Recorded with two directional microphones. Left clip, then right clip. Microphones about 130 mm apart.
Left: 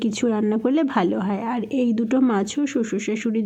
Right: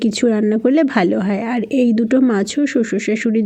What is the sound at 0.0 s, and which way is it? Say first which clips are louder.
Speech: right 6 dB; 30° right (ahead or behind).